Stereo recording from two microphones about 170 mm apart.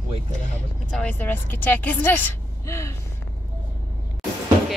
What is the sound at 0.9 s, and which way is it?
A woman's voice, 10° left (ahead or behind).